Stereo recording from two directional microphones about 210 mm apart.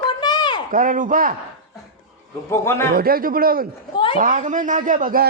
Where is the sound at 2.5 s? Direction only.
10° left (ahead or behind).